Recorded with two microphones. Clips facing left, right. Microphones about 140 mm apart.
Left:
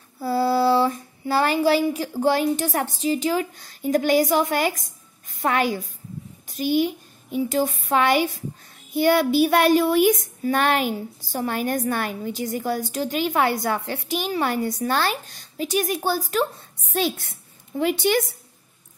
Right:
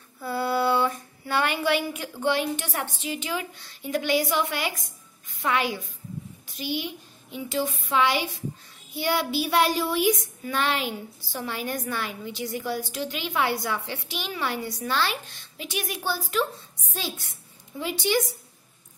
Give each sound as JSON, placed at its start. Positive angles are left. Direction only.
{"t": 0.2, "sound": "female singing", "side_deg": 35}
{"t": 1.3, "sound": "a woman's voice", "side_deg": 35}
{"t": 16.9, "sound": "speech", "side_deg": 60}